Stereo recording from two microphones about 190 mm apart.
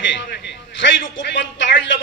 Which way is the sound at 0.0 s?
75° left (ahead or behind).